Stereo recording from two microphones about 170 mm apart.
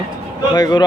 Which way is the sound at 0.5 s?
25° left (ahead or behind).